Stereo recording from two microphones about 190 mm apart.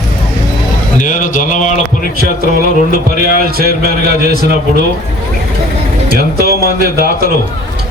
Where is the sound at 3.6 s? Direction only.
55° right (ahead or behind).